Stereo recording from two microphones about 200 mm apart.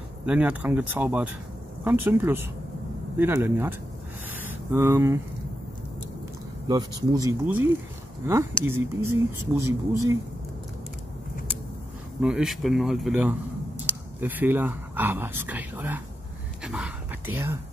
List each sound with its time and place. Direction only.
0.2 s speech: 5° right (ahead or behind)
4.4 s a sound: 10° right (ahead or behind)
6.7 s speech: 20° right (ahead or behind)
8.6 s speech: 10° right (ahead or behind)
12.2 s speech: 5° right (ahead or behind)
16.6 s whispering: 5° right (ahead or behind)